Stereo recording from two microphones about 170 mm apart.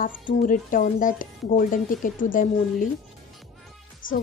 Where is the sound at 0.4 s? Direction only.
50° left (ahead or behind).